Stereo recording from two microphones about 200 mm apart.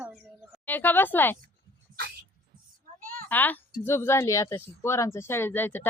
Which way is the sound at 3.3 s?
10° left (ahead or behind).